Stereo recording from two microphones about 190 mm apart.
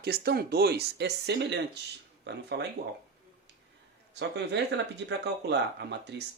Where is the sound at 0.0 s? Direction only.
55° right (ahead or behind).